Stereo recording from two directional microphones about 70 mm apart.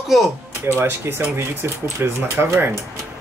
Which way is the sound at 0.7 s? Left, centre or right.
Right.